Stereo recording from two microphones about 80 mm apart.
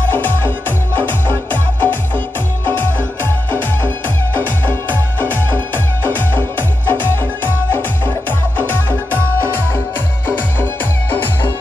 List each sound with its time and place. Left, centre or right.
0.1 s music: left